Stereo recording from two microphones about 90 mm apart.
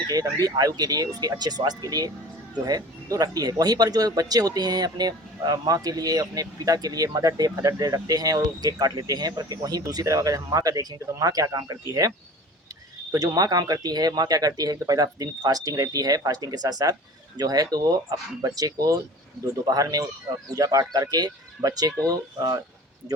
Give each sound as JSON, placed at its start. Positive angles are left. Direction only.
{"t": 0.1, "sound": "speech", "side_deg": -45}
{"t": 13.1, "sound": "speech", "side_deg": -45}